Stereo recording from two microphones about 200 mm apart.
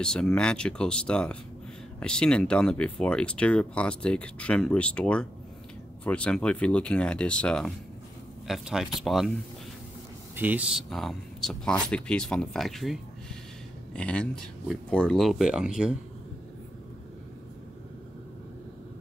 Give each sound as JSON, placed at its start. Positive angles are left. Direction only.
{"t": 0.0, "sound": "speech", "side_deg": 5}
{"t": 10.3, "sound": "speech", "side_deg": -10}